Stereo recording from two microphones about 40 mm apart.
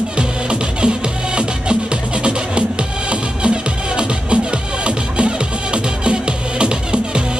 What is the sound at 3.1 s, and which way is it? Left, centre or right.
Music, right.